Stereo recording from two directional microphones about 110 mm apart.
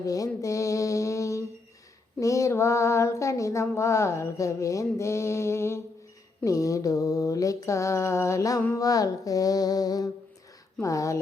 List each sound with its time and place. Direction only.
0.0 s mantra: 30° left (ahead or behind)
2.2 s female singing: 30° left (ahead or behind)
6.4 s music: 30° left (ahead or behind)
10.8 s female singing: 30° left (ahead or behind)